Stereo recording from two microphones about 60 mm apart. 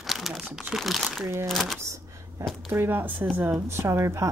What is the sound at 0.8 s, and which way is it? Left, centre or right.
Speech, centre.